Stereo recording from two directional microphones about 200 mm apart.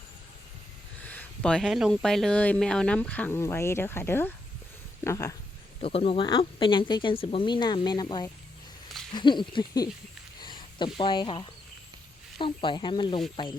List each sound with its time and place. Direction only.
1.0 s speech: 10° left (ahead or behind)
5.8 s speech: 30° left (ahead or behind)